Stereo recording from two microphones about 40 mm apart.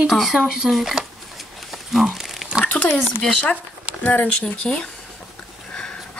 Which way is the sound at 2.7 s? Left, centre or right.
Left.